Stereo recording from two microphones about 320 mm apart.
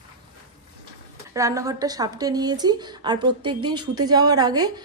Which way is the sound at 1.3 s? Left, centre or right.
Centre.